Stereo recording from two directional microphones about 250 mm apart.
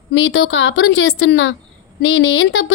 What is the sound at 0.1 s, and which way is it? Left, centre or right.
A woman's voice, left.